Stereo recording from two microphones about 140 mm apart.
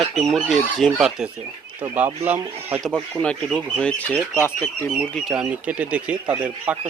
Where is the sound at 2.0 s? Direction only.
15° right (ahead or behind).